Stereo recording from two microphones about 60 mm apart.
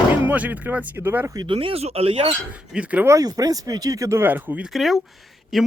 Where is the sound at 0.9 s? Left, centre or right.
Right.